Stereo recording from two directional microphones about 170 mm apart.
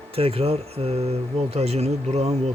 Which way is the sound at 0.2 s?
35° right (ahead or behind).